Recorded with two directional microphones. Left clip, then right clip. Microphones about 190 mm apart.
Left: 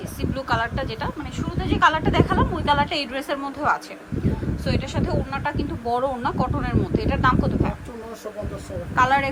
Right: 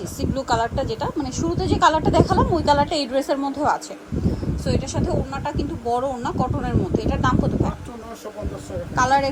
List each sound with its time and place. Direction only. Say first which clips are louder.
0.2 s a woman's voice: right 2 dB; 20° right (ahead or behind)
9.0 s speech: even; 15° right (ahead or behind)